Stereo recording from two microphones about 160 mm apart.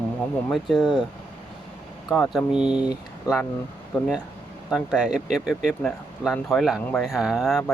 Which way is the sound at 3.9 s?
Centre (ahead or behind).